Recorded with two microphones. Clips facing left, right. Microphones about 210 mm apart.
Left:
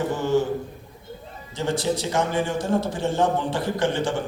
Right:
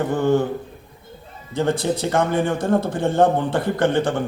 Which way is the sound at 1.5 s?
55° right (ahead or behind).